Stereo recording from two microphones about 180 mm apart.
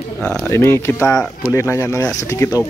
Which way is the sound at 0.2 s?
5° left (ahead or behind).